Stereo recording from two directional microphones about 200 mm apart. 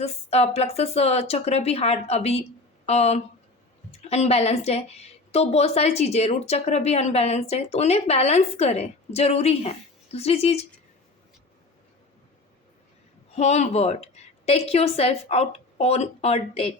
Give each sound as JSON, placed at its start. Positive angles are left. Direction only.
{"t": 0.0, "sound": "a woman's voice", "side_deg": 30}
{"t": 13.3, "sound": "a woman's voice", "side_deg": 35}